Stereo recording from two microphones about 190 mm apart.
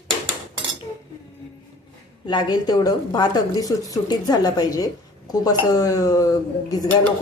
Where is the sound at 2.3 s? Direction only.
20° left (ahead or behind).